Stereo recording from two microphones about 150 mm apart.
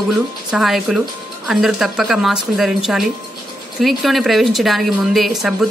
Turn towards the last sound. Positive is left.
turn(degrees=0)  # may be behind; listen again after turning